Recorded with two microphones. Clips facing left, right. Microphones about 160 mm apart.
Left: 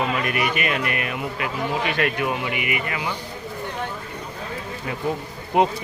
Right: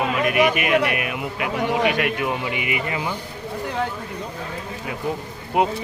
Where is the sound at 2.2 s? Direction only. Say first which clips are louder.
Even; 25° right (ahead or behind).